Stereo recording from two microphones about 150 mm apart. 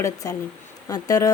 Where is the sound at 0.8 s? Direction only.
25° left (ahead or behind).